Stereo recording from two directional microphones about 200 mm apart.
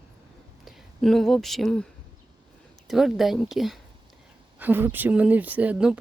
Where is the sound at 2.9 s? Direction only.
Centre (ahead or behind).